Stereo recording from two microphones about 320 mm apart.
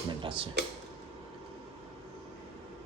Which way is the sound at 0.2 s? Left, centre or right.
Centre.